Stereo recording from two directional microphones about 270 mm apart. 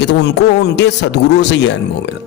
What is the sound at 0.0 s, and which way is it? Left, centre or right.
Speech, left.